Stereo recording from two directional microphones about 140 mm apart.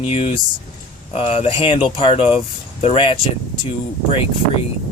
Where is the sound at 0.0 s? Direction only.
45° left (ahead or behind).